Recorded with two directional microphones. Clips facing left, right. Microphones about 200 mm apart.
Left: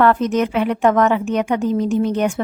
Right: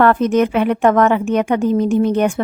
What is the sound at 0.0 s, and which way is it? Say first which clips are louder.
A woman's voice: right 3 dB; 55° right (ahead or behind).